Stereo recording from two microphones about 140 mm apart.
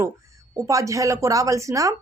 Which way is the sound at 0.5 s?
25° right (ahead or behind).